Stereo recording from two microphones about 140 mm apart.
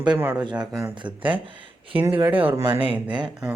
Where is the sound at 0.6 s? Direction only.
30° right (ahead or behind).